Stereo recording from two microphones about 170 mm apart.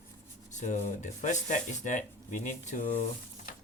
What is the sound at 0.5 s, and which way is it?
Speech, 45° left (ahead or behind).